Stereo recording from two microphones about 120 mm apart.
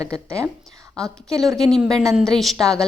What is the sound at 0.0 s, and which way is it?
Speech, 25° right (ahead or behind).